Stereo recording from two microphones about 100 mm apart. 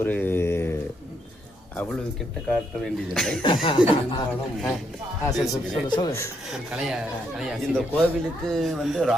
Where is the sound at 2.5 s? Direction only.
5° left (ahead or behind).